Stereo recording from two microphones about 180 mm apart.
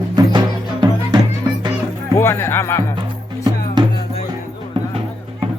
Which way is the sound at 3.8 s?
25° right (ahead or behind).